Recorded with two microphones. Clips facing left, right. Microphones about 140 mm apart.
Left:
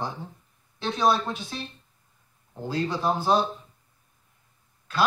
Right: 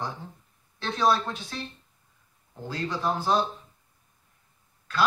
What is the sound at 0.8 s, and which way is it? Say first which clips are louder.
Speech: left 1 dB; 20° left (ahead or behind).